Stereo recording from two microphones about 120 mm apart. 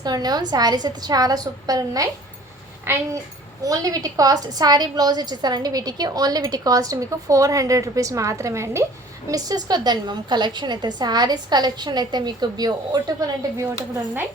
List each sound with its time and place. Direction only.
0.0 s a woman's voice: 35° right (ahead or behind)
2.8 s a child's voice: 20° right (ahead or behind)
3.6 s a woman's voice: 30° right (ahead or behind)
9.3 s a woman's voice: 35° right (ahead or behind)